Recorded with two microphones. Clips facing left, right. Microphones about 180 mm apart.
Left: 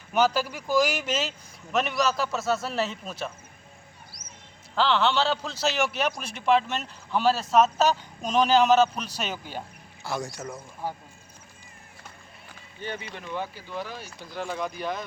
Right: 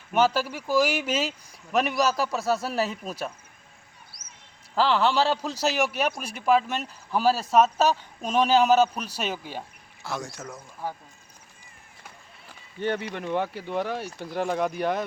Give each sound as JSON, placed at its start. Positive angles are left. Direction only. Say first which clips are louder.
{"t": 0.1, "sound": "a man's voice", "louder": "right 1 dB", "side_deg": -5}
{"t": 4.7, "sound": "a man's voice", "louder": "right 1 dB", "side_deg": -5}
{"t": 12.8, "sound": "speech", "louder": "right 8 dB", "side_deg": -70}